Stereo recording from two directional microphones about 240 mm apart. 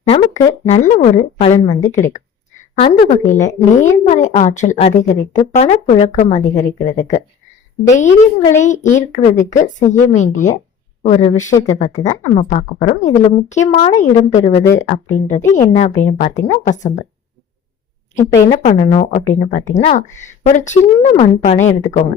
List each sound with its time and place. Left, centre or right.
0.1 s a sound: centre
0.7 s speech: left
3.0 s speech: left
18.6 s speech: left